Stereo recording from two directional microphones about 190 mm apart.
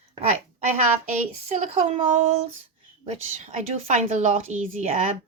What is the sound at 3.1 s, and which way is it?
A woman's voice, 35° right (ahead or behind).